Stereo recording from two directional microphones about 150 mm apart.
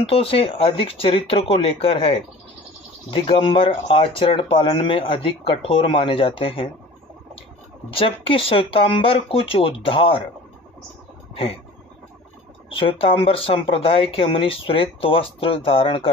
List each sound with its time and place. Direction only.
0.1 s speech: 40° left (ahead or behind)
7.9 s speech: 40° left (ahead or behind)
12.6 s speech: 35° left (ahead or behind)